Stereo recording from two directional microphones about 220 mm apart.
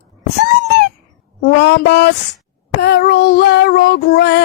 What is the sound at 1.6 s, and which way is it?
Child singing, 50° left (ahead or behind).